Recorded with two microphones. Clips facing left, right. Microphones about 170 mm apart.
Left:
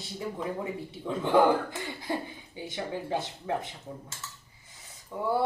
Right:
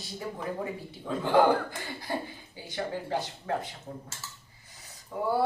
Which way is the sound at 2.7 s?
25° left (ahead or behind).